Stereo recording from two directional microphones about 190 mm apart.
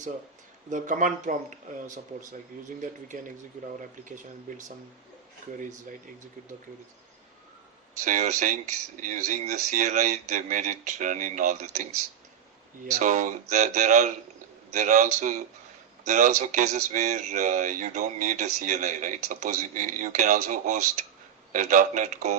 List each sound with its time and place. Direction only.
0.7 s speech: 40° right (ahead or behind)
2.8 s speech: 45° right (ahead or behind)
8.0 s speech: 40° right (ahead or behind)